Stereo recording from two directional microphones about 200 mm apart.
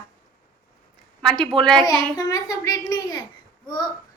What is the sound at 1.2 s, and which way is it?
Speech, 5° left (ahead or behind).